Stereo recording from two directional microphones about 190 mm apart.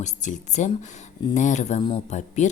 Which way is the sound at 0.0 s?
40° left (ahead or behind).